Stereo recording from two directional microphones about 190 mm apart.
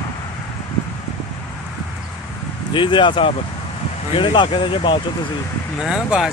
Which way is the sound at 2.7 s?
25° left (ahead or behind).